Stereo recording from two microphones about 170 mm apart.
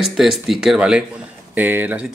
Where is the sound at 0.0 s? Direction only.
Centre (ahead or behind).